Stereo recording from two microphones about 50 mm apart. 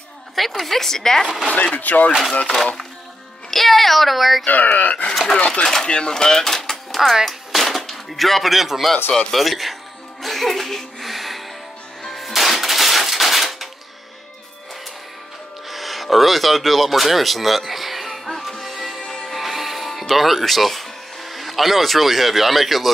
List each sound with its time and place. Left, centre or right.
0.4 s a child's voice: centre
1.8 s speech: left
3.4 s a child's voice: centre
4.5 s speech: left
5.1 s a child's voice: centre
7.2 s a sound: centre
9.1 s a child's voice: centre
10.2 s music: centre
15.7 s a sound: centre
18.9 s music: centre
19.3 s music: centre